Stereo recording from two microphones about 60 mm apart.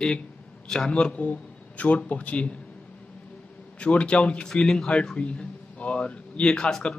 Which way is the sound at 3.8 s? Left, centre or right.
Centre.